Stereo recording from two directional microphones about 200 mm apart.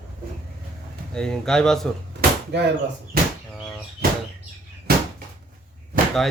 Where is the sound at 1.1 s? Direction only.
5° left (ahead or behind).